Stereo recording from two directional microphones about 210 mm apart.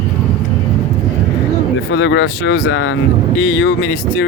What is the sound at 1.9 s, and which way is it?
Speech, 65° left (ahead or behind).